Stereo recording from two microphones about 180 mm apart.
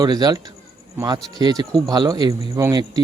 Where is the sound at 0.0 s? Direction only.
20° right (ahead or behind).